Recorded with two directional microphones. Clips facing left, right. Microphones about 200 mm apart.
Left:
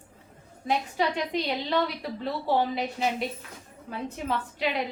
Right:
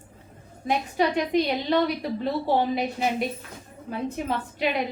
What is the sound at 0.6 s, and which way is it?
A woman's voice, 15° right (ahead or behind).